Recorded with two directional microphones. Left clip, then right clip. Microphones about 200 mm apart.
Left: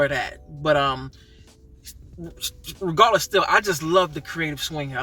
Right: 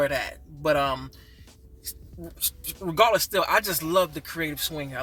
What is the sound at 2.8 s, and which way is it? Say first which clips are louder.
Speech: left 3 dB; 15° right (ahead or behind).